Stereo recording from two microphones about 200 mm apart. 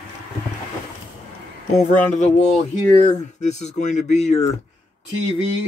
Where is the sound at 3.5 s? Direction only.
35° left (ahead or behind).